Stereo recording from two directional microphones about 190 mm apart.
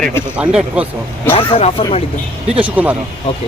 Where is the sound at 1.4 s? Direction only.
30° left (ahead or behind).